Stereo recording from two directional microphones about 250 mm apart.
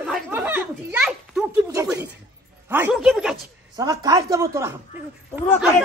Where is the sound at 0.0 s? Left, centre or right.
Centre.